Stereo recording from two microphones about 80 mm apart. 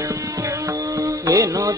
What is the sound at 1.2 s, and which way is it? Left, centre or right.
Music, right.